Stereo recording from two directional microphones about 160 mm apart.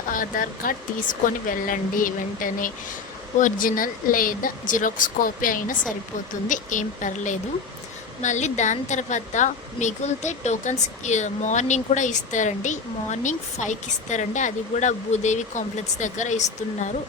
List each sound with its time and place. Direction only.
0.1 s speech: 60° left (ahead or behind)